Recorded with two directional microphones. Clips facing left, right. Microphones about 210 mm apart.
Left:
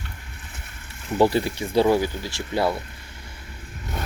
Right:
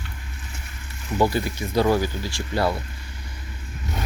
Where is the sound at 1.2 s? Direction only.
30° left (ahead or behind).